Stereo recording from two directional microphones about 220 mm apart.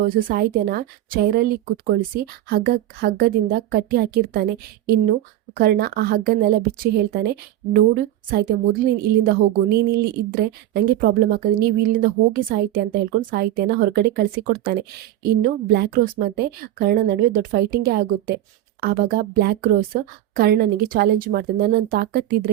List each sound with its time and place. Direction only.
0.0 s a woman's voice: 40° right (ahead or behind)
5.5 s a woman's voice: 45° right (ahead or behind)